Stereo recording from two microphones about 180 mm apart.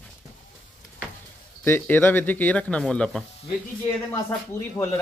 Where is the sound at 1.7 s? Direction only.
10° left (ahead or behind).